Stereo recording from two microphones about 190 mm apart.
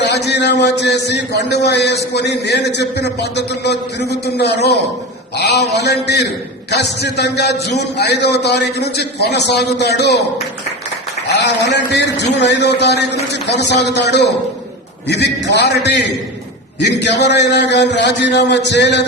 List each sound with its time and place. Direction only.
0.0 s a man's voice: 65° left (ahead or behind)
11.3 s a man's voice: 65° left (ahead or behind)